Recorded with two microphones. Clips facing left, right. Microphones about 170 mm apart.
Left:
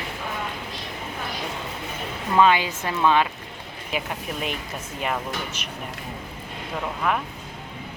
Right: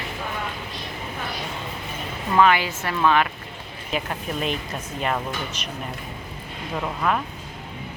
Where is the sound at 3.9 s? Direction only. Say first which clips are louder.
Right 2 dB; 5° left (ahead or behind).